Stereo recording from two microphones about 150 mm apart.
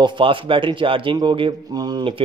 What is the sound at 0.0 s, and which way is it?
A man's voice, 35° right (ahead or behind).